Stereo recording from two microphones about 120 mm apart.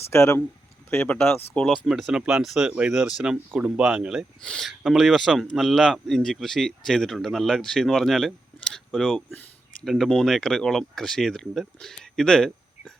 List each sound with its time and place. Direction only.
0.1 s speech: 20° left (ahead or behind)
1.5 s speech: 5° left (ahead or behind)